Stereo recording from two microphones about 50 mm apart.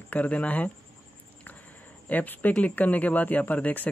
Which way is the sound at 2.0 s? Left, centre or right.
Left.